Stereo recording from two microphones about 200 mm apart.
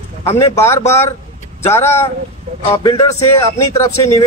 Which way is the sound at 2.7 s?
15° left (ahead or behind).